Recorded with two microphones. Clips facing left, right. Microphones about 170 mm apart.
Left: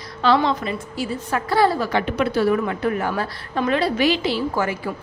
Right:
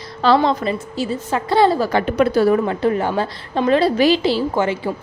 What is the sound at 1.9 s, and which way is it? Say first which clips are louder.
A woman's voice: right 5 dB; 40° right (ahead or behind).